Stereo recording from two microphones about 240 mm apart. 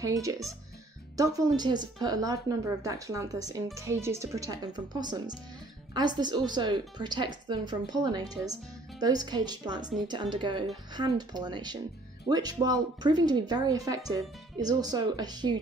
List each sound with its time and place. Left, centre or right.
0.0 s speech: centre